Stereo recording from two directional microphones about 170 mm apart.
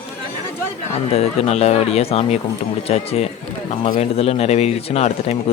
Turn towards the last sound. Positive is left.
turn(degrees=40)  # may be behind; listen again after turning